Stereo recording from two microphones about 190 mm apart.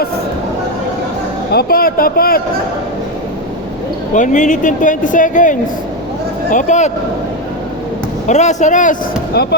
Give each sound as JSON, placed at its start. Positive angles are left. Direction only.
{"t": 1.5, "sound": "a woman's voice", "side_deg": 50}
{"t": 4.1, "sound": "a woman's voice", "side_deg": 40}
{"t": 8.3, "sound": "speech", "side_deg": 40}
{"t": 9.3, "sound": "speech", "side_deg": 60}